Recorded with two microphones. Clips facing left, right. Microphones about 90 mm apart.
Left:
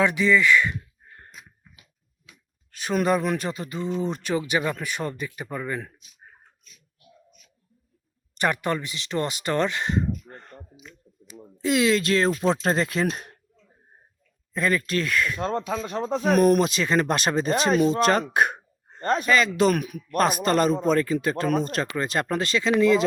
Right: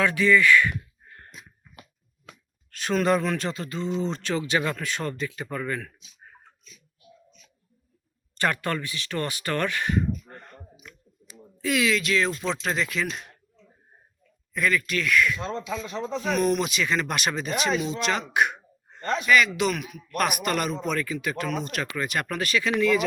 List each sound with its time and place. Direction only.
0.0 s speech: 20° left (ahead or behind)
1.7 s finger snapping: 50° right (ahead or behind)
2.6 s speech: 10° left (ahead or behind)
8.4 s speech: 20° left (ahead or behind)
10.3 s speech: 5° left (ahead or behind)
11.3 s speech: 30° left (ahead or behind); by 13.3 s 45° left (ahead or behind)
14.5 s speech: 35° left (ahead or behind)
15.4 s speech: 50° left (ahead or behind)
16.6 s speech: 35° left (ahead or behind)
20.1 s speech: 30° left (ahead or behind)